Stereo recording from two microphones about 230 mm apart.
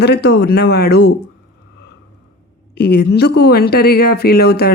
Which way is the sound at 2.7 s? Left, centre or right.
Left.